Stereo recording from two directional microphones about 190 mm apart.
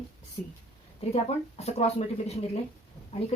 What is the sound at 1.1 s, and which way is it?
Speech, 35° left (ahead or behind).